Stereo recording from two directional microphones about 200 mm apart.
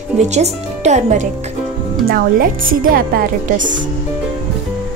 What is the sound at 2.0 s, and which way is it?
A woman's voice, 50° right (ahead or behind).